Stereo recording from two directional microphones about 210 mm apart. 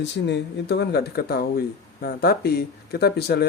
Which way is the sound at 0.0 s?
55° left (ahead or behind).